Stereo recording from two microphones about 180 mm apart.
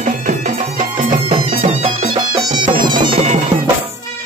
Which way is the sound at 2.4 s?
25° right (ahead or behind).